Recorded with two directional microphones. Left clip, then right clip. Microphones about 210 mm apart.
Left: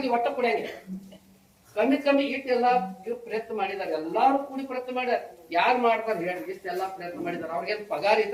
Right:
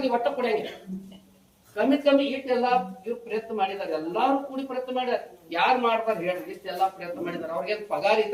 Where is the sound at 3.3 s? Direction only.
Centre (ahead or behind).